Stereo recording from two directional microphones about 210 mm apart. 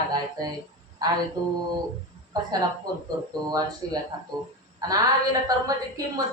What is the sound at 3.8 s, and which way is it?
Speech, 20° right (ahead or behind).